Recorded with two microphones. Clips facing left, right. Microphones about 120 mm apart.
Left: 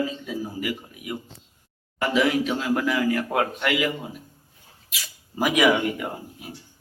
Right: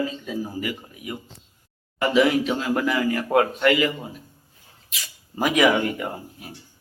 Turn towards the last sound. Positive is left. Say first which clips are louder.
# right 1 dB
turn(degrees=10)  # may be behind; listen again after turning